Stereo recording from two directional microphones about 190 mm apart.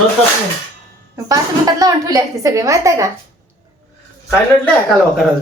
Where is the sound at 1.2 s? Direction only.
20° right (ahead or behind).